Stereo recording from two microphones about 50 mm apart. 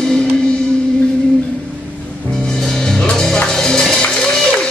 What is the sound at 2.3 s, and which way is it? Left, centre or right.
Music, centre.